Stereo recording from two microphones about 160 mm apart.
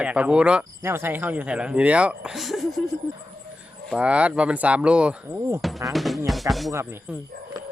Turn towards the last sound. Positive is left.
turn(degrees=-15)  # may be behind; listen again after turning